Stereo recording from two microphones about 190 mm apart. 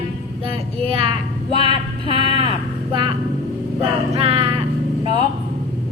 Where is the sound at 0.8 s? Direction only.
30° right (ahead or behind).